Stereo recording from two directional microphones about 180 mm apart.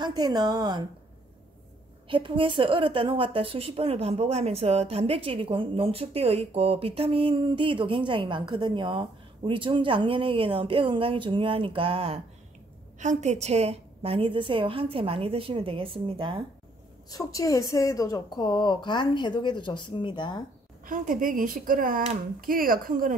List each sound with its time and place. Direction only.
0.0 s a woman's voice: 20° right (ahead or behind)
2.0 s a woman's voice: 30° right (ahead or behind)
17.1 s a woman's voice: 20° left (ahead or behind)
20.8 s speech: 50° right (ahead or behind)